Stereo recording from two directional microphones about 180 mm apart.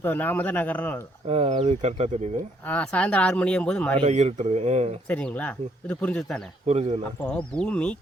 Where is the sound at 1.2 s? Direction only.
35° right (ahead or behind).